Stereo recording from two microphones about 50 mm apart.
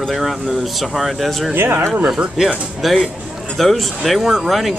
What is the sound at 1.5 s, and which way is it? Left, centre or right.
Speech, right.